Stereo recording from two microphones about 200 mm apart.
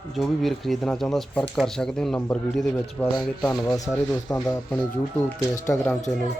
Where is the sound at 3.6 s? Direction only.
15° left (ahead or behind).